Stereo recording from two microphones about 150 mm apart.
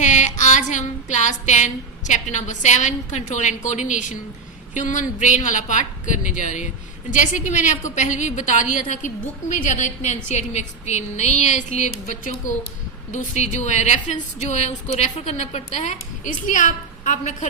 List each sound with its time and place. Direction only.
0.0 s music: 50° left (ahead or behind)
4.7 s a woman's voice: 55° left (ahead or behind)